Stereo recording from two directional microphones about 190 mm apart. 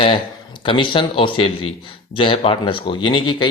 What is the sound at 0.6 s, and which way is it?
Speech, 25° left (ahead or behind).